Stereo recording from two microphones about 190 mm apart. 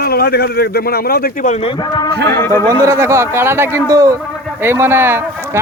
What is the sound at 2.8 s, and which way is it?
Speech, 15° right (ahead or behind).